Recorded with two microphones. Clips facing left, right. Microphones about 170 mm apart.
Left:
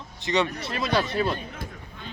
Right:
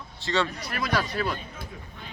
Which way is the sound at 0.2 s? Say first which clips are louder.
Left 2 dB; 20° left (ahead or behind).